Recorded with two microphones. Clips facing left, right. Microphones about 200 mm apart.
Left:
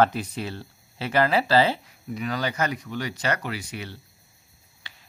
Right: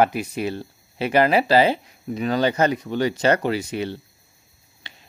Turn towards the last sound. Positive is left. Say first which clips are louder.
# right 3 dB
turn(degrees=-20)  # may be behind; listen again after turning